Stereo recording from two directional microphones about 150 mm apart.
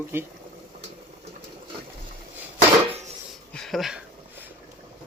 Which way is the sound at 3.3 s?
5° left (ahead or behind).